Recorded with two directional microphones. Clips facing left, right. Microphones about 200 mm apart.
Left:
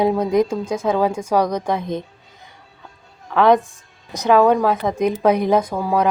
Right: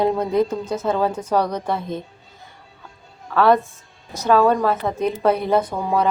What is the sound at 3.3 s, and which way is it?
A woman's voice, 15° left (ahead or behind).